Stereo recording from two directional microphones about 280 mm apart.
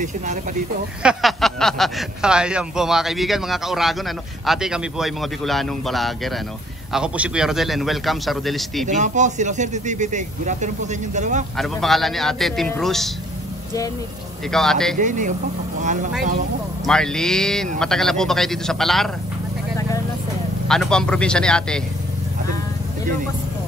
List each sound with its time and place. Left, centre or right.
0.0 s speech: right
1.0 s speech: centre
8.8 s speech: right
11.5 s speech: centre
14.5 s speech: centre
15.0 s speech: right
16.8 s speech: centre
20.6 s speech: centre